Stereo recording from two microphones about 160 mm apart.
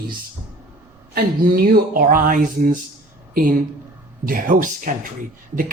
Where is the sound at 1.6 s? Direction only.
65° right (ahead or behind).